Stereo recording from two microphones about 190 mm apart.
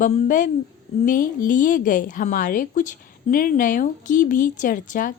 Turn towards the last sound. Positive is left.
turn(degrees=45)  # may be behind; listen again after turning